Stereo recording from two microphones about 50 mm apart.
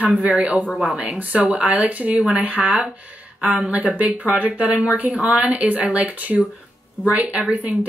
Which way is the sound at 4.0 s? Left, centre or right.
Right.